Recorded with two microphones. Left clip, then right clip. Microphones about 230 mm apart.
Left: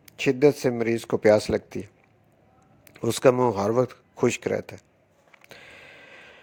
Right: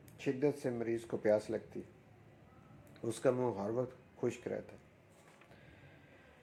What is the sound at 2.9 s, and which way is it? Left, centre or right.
A man's voice, left.